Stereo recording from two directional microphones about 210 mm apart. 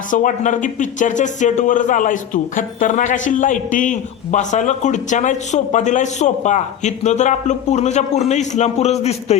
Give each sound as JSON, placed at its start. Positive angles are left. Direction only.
{"t": 0.1, "sound": "a man's voice", "side_deg": 40}